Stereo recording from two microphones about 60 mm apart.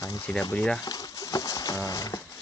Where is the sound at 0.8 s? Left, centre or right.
Left.